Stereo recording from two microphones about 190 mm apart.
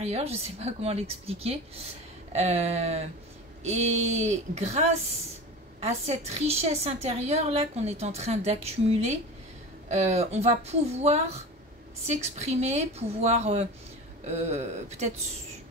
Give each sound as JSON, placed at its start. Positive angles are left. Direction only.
{"t": 0.0, "sound": "a woman's voice", "side_deg": -35}